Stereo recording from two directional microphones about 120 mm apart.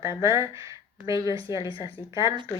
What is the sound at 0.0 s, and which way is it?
A woman's voice, 25° right (ahead or behind).